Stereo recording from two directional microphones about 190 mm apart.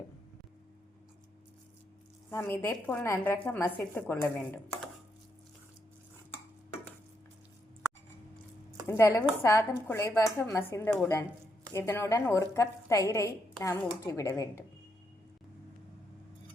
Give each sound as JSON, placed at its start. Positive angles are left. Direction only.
{"t": 2.3, "sound": "a woman's voice", "side_deg": 15}
{"t": 8.9, "sound": "a woman's voice", "side_deg": 15}